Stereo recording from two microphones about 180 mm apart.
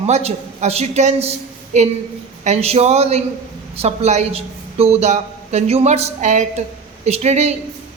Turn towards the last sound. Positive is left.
turn(degrees=-40)  # may be behind; listen again after turning